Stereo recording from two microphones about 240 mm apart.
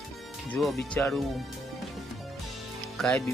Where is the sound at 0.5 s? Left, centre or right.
Centre.